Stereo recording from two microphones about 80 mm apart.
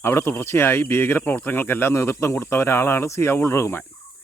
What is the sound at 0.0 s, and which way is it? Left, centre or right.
Speech, left.